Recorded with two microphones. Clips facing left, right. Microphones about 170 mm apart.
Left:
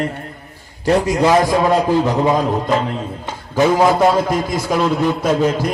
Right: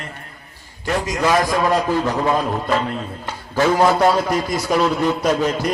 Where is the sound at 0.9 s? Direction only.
30° left (ahead or behind).